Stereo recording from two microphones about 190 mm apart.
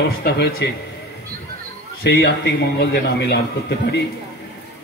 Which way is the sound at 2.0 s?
60° left (ahead or behind).